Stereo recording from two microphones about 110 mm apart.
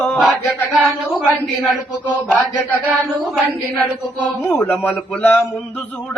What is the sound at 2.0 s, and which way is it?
Music, 15° left (ahead or behind).